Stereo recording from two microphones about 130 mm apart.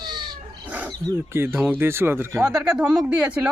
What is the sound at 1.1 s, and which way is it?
Speech, 15° right (ahead or behind).